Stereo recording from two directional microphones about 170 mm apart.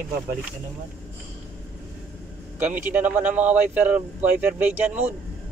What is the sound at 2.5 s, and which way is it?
Speech, 10° right (ahead or behind).